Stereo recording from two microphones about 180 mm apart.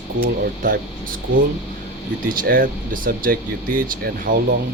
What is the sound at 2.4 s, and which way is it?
Speech, 50° right (ahead or behind).